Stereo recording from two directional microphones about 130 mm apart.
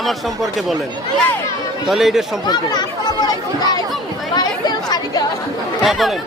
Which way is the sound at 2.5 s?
30° left (ahead or behind).